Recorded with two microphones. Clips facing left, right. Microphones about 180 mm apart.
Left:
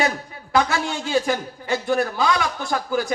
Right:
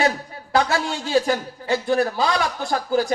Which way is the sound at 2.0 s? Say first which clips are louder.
Right 1 dB; 35° right (ahead or behind).